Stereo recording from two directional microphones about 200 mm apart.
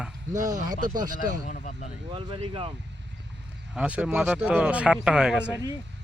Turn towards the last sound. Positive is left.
turn(degrees=-5)  # may be behind; listen again after turning